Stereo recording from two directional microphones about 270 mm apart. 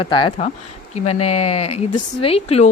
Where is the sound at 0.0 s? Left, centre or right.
Centre.